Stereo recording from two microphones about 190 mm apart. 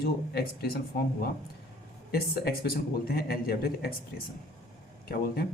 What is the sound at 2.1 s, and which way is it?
Speech, 50° left (ahead or behind).